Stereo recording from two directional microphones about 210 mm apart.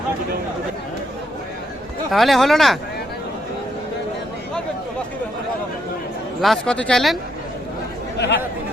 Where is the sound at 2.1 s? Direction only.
Centre (ahead or behind).